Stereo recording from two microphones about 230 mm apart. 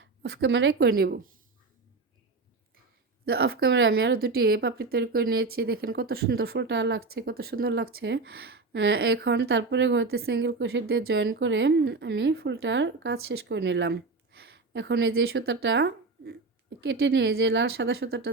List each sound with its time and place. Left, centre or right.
0.0 s speech: right
3.2 s speech: right